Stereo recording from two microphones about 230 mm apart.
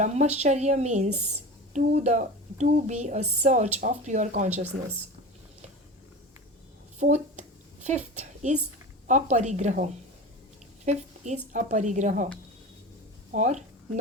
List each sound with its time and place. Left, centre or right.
0.0 s a woman's voice: right
7.0 s a sound: right
8.2 s a woman's voice: right
10.8 s a sound: right
11.5 s a woman's voice: right
13.3 s speech: right